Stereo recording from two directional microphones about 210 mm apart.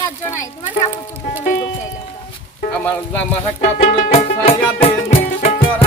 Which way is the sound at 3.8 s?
30° left (ahead or behind).